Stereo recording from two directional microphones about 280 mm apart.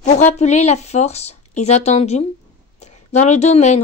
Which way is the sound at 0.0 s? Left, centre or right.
Left.